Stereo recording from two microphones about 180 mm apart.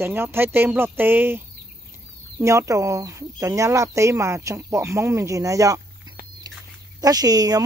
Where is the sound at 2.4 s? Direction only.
15° right (ahead or behind).